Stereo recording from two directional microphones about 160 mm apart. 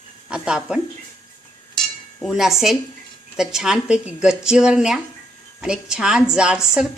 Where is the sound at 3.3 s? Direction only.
5° right (ahead or behind).